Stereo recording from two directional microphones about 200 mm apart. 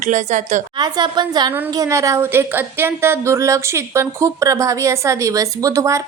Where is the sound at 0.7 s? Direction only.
20° right (ahead or behind).